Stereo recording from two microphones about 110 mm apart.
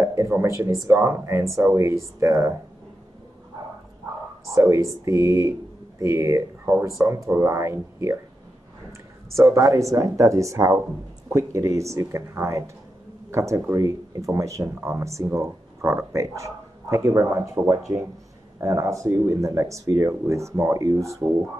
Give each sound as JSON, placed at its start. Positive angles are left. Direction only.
{"t": 0.0, "sound": "speech", "side_deg": -25}
{"t": 4.6, "sound": "speech", "side_deg": -25}
{"t": 9.3, "sound": "speech", "side_deg": -25}